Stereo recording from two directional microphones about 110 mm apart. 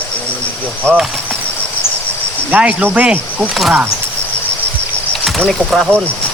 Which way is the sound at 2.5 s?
15° right (ahead or behind).